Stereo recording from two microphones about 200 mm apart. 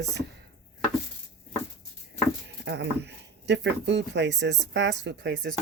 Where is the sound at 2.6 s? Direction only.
60° right (ahead or behind).